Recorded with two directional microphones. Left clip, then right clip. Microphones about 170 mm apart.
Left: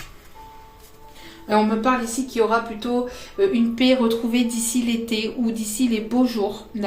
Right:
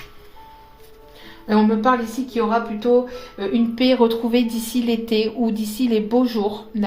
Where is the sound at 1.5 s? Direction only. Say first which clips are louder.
Right 2 dB; 40° right (ahead or behind).